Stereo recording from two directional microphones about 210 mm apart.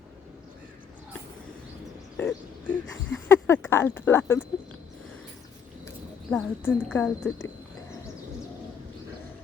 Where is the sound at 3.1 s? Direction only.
10° left (ahead or behind).